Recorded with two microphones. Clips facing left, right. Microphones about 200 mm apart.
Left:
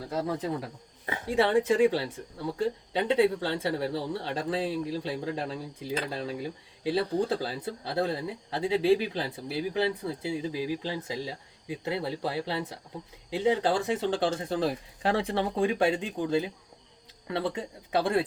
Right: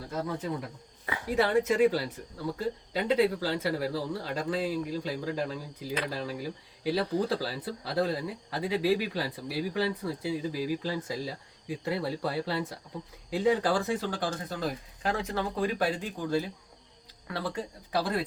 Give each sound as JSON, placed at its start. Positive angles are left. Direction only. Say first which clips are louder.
{"t": 0.2, "sound": "speech", "louder": "left 2 dB", "side_deg": 30}